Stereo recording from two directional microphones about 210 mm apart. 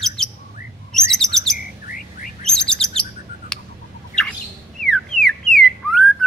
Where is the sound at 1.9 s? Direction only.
40° left (ahead or behind).